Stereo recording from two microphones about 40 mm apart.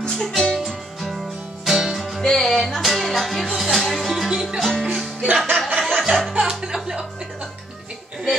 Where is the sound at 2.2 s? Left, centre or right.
Centre.